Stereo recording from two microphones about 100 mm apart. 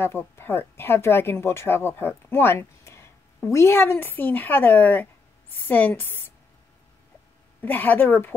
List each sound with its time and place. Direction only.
0.0 s speech: 25° left (ahead or behind)
7.6 s speech: 20° left (ahead or behind)